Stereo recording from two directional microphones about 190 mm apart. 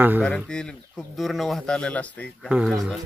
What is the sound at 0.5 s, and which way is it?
Speech, 5° left (ahead or behind).